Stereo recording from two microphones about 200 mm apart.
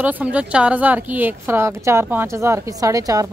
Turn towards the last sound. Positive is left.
turn(degrees=-15)  # may be behind; listen again after turning